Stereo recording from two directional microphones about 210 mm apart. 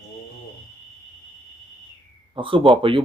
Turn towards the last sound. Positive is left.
turn(degrees=-25)  # may be behind; listen again after turning